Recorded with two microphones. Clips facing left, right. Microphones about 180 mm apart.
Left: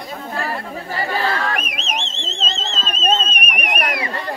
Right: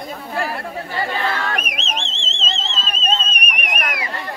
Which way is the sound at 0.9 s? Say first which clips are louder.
Left 2 dB; 35° left (ahead or behind).